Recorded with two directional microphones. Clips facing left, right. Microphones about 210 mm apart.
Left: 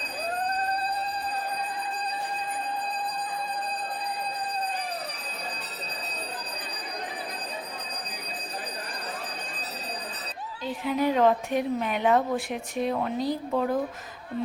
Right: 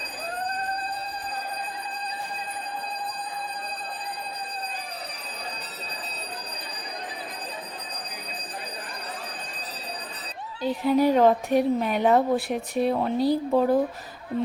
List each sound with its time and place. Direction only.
10.6 s a woman's voice: 35° right (ahead or behind)